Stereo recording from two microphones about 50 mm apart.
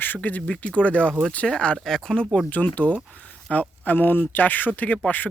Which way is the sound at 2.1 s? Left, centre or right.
Centre.